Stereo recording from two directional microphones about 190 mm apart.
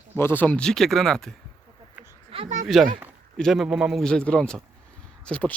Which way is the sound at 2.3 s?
30° right (ahead or behind).